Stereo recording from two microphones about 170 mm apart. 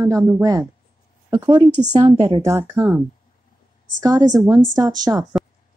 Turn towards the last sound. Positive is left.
turn(degrees=-20)  # may be behind; listen again after turning